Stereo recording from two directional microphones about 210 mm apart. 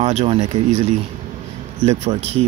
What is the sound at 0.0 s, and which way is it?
Speech, 30° right (ahead or behind).